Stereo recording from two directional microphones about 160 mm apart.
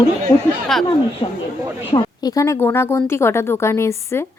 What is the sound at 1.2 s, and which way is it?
Speech, 35° left (ahead or behind).